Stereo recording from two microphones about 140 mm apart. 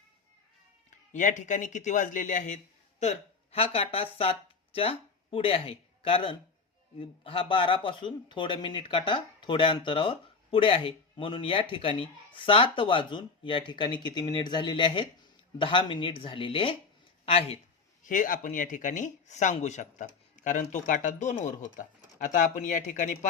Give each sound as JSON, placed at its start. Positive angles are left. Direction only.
{"t": 1.1, "sound": "speech", "side_deg": 65}
{"t": 3.0, "sound": "speech", "side_deg": 50}
{"t": 18.0, "sound": "speech", "side_deg": 70}